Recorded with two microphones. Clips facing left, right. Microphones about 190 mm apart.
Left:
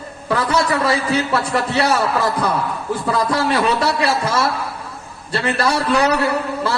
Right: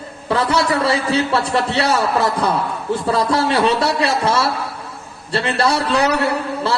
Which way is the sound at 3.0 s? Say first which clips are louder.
Right 1 dB; 30° right (ahead or behind).